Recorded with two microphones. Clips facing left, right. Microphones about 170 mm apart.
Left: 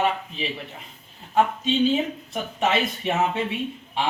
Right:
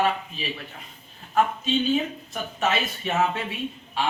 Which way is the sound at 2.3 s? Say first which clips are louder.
Left 1 dB; 20° left (ahead or behind).